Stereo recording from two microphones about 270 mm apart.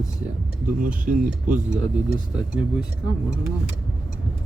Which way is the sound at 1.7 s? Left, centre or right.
Centre.